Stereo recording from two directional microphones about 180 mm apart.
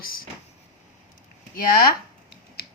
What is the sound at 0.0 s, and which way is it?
Speech, 55° left (ahead or behind).